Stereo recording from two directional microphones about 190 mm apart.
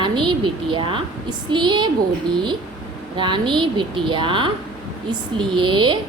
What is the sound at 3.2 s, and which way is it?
A woman's voice, 25° right (ahead or behind).